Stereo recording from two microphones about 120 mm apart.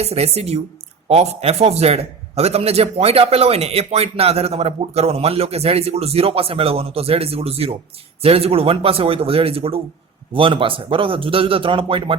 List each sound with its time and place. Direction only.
0.0 s a man's voice: 60° right (ahead or behind)